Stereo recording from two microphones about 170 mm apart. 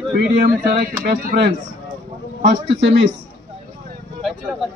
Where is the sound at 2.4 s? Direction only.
90° right.